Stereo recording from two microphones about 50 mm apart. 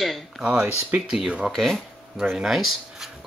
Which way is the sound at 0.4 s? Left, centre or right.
Right.